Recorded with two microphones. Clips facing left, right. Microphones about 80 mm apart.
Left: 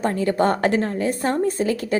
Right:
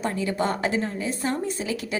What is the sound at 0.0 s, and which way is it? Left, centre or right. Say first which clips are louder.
A woman's voice: left 6 dB; left.